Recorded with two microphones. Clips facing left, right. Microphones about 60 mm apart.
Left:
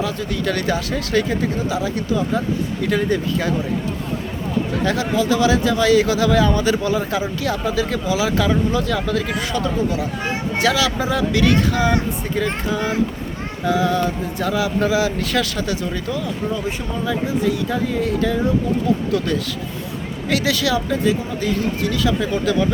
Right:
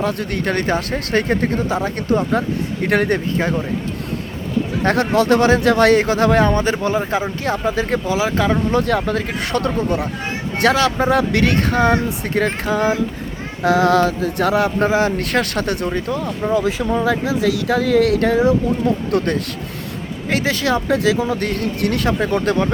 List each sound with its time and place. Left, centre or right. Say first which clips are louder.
0.0 s speech: right 2 dB; right
0.5 s speech: right 2 dB; right
2.9 s speech: right 3 dB; right
4.8 s speech: right 5 dB; right
8.7 s speech: right 3 dB; right
9.5 s speech: right 4 dB; right
13.7 s a sound: right 5 dB; right
14.8 s speech: right 2 dB; right
15.9 s speech: right 3 dB; right
16.5 s speech: right 7 dB; right
18.2 s speech: right 5 dB; right
19.1 s speech: right 2 dB; right
20.3 s speech: right 1 dB; right
20.9 s speech: right 3 dB; right